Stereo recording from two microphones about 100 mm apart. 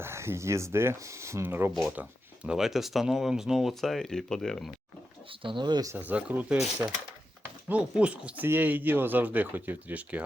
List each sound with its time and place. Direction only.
0.0 s speech: 25° right (ahead or behind); by 4.7 s 5° left (ahead or behind)
5.4 s speech: 55° right (ahead or behind)
6.0 s speech: 15° right (ahead or behind)
6.8 s speech: 25° right (ahead or behind)
7.7 s speech: 10° right (ahead or behind)